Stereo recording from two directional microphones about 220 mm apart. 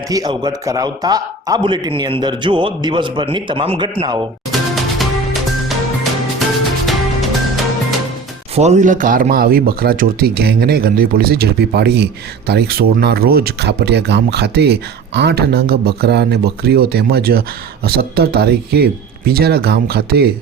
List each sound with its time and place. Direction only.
0.1 s a man's voice: 20° right (ahead or behind)
4.7 s music: centre (ahead or behind)
6.8 s music: centre (ahead or behind)
8.5 s speech: 30° right (ahead or behind)